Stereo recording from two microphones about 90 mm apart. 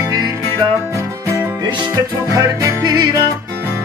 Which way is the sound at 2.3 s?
35° right (ahead or behind).